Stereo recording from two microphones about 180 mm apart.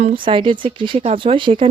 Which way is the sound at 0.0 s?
30° right (ahead or behind).